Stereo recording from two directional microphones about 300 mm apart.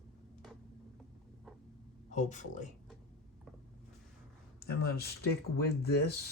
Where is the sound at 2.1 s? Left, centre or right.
Left.